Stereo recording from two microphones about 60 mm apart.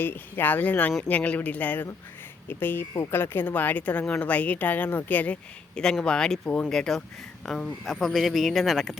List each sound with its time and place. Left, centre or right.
0.0 s speech: left
5.7 s speech: centre
6.7 s speech: centre